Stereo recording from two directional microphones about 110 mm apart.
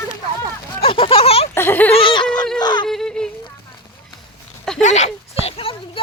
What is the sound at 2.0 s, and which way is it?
Laughter, 50° left (ahead or behind).